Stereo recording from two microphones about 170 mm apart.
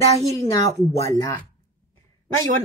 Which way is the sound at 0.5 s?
20° left (ahead or behind).